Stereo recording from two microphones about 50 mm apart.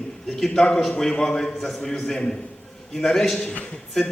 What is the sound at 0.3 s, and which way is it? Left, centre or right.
A man's voice, centre.